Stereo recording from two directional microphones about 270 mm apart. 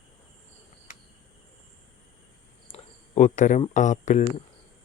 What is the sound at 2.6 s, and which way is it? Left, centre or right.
Speech, left.